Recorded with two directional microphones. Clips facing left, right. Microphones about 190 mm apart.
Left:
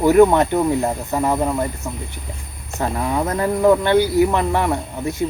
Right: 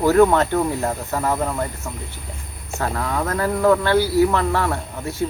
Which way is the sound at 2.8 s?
20° left (ahead or behind).